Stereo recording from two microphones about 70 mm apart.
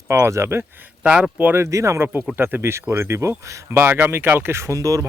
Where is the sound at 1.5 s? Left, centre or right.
Right.